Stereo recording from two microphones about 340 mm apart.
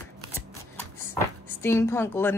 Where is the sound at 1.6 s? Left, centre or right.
Centre.